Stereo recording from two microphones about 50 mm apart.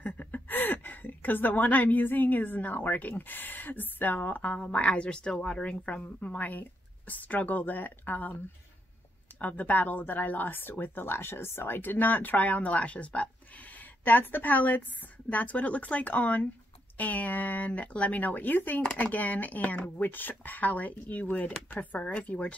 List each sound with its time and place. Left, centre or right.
0.0 s gasp: left
0.5 s speech: left
9.4 s speech: left